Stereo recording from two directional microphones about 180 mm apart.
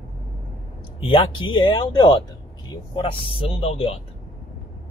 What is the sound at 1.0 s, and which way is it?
Speech, 30° left (ahead or behind).